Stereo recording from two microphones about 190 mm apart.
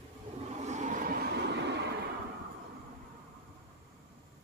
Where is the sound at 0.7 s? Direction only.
40° right (ahead or behind); by 1.9 s 60° right (ahead or behind).